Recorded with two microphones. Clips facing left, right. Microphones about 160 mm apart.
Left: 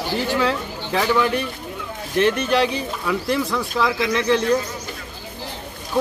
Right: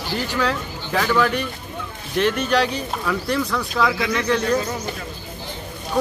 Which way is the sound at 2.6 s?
20° left (ahead or behind).